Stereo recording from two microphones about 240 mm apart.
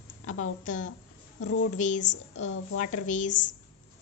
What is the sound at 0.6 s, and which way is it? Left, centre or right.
A woman's voice, left.